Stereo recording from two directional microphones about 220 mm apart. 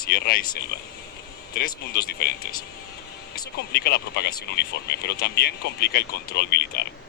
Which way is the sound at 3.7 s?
45° left (ahead or behind).